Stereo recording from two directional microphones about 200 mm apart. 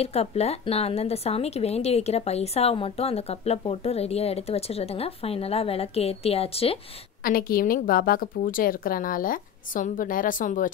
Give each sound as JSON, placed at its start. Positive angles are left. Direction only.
{"t": 0.0, "sound": "a woman's voice", "side_deg": 30}
{"t": 7.2, "sound": "a woman's voice", "side_deg": 45}